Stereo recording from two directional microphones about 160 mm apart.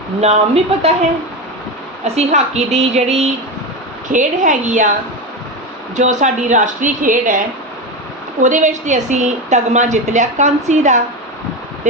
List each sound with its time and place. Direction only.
0.2 s a woman's voice: 40° right (ahead or behind)
2.1 s a woman's voice: 45° right (ahead or behind)
6.0 s a woman's voice: 50° right (ahead or behind)